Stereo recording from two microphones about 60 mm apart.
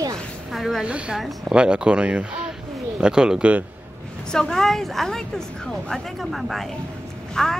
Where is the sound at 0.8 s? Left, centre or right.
Centre.